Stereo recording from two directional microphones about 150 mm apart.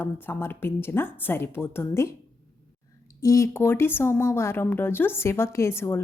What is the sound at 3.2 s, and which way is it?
A woman's voice, 20° left (ahead or behind).